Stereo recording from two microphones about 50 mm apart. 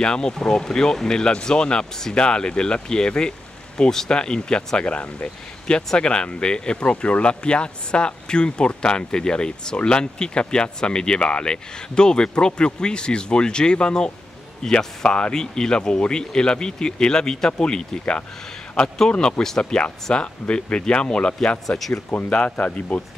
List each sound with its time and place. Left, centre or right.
0.0 s speech: centre
21.6 s speech: centre
22.1 s speech: left